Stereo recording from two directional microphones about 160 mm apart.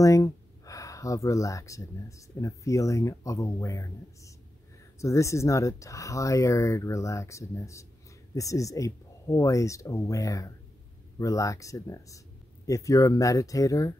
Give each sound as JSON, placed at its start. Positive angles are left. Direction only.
{"t": 0.0, "sound": "speech", "side_deg": 20}